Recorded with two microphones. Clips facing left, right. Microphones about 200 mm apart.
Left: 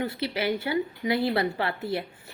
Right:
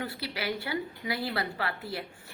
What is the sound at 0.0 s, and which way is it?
A woman's voice, 20° left (ahead or behind).